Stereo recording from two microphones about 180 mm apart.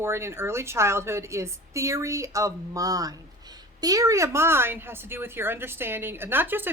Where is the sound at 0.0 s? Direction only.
15° right (ahead or behind).